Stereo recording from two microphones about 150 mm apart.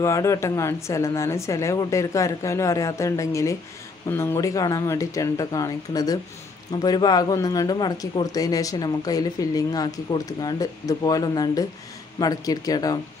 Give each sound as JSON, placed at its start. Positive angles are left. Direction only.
{"t": 0.0, "sound": "speech", "side_deg": 20}